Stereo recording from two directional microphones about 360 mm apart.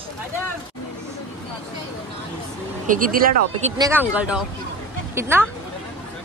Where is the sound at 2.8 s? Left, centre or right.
Right.